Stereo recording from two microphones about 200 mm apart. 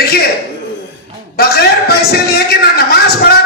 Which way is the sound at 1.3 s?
50° left (ahead or behind).